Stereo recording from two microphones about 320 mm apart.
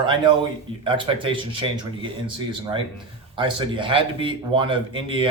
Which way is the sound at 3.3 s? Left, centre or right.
Centre.